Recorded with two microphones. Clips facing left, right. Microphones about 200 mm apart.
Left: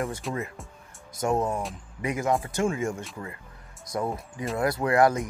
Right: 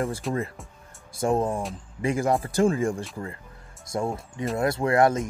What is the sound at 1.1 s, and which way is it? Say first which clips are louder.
Speech: right 2 dB; 30° right (ahead or behind).